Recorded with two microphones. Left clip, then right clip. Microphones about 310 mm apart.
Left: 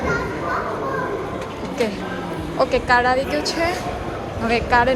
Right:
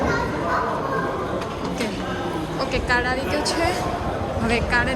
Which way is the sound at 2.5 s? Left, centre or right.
Centre.